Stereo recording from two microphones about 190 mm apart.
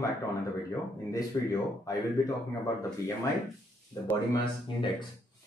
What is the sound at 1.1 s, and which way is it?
Speech, 20° left (ahead or behind).